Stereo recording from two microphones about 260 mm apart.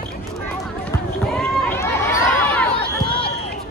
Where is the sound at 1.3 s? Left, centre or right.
Centre.